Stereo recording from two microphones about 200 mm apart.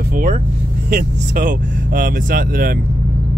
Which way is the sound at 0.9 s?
40° right (ahead or behind).